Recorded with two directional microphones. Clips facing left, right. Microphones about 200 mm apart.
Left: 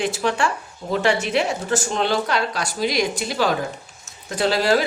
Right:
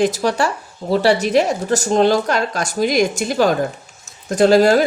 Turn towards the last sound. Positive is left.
turn(degrees=-45)  # may be behind; listen again after turning